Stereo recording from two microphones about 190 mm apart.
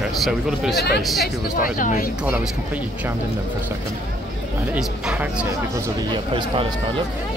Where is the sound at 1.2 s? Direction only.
45° left (ahead or behind).